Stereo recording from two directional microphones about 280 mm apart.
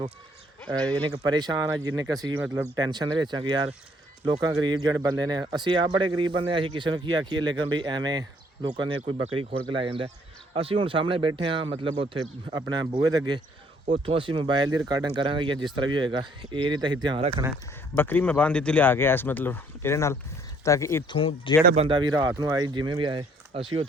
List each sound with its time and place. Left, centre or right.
1.0 s speech: centre
13.8 s speech: right
17.9 s speech: centre
21.8 s speech: centre